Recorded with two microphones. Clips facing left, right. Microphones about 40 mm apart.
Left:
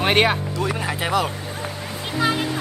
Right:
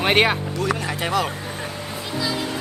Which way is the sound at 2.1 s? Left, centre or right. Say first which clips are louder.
Left 4 dB; left.